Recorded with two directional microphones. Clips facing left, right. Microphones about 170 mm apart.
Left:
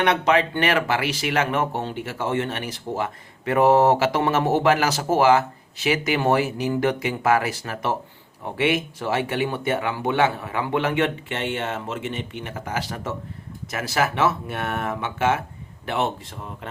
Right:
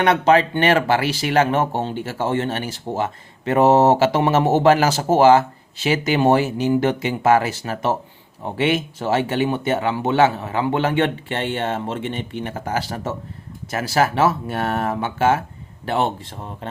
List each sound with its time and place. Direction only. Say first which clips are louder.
0.1 s speech: right 4 dB; 35° right (ahead or behind)